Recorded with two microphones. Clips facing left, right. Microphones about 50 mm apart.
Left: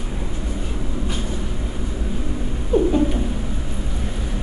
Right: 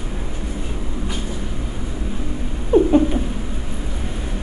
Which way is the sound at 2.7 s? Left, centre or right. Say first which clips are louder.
Right 4 dB; centre.